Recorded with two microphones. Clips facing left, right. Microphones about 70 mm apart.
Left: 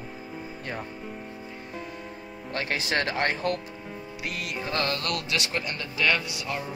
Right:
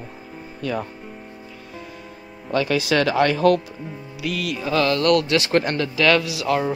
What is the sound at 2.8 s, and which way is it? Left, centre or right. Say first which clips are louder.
Speech: right 7 dB; right.